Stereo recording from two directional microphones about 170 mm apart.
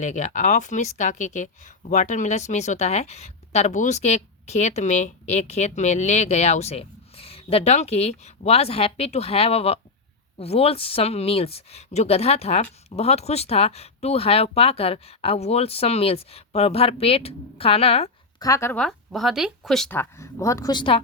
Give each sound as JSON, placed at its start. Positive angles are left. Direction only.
{"t": 0.0, "sound": "speech", "side_deg": 45}
{"t": 18.3, "sound": "speech", "side_deg": 20}
{"t": 18.8, "sound": "speech", "side_deg": 0}
{"t": 20.0, "sound": "speech", "side_deg": 15}